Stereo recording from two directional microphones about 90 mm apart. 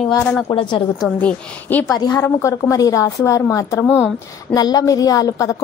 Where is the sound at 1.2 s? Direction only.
20° left (ahead or behind).